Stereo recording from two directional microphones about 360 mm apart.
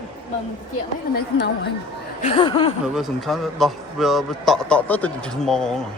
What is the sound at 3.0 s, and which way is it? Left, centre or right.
A man's voice, centre.